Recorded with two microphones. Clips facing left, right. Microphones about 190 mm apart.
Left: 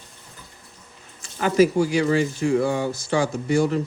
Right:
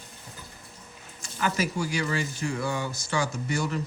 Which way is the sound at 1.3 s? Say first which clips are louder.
Left 10 dB; 40° left (ahead or behind).